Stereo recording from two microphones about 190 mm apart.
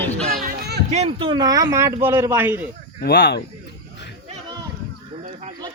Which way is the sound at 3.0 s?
55° left (ahead or behind).